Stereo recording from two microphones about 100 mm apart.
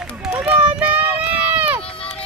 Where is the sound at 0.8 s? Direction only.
15° right (ahead or behind).